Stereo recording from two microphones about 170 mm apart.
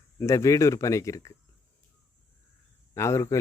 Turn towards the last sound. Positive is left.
turn(degrees=15)  # may be behind; listen again after turning